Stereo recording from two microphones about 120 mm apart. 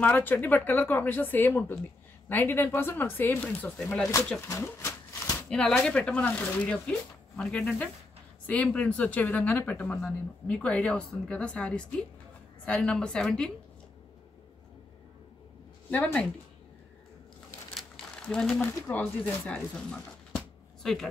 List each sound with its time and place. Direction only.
0.0 s speech: 15° left (ahead or behind)
4.5 s a sound: 20° left (ahead or behind)
5.5 s speech: 5° left (ahead or behind)
15.9 s speech: 10° left (ahead or behind)
17.7 s a sound: 5° left (ahead or behind)
18.9 s speech: 15° left (ahead or behind)